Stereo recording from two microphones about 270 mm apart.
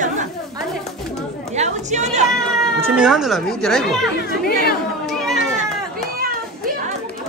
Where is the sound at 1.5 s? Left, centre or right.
Right.